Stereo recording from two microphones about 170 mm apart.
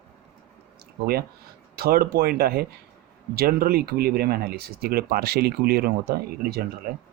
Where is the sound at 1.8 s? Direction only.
65° right (ahead or behind).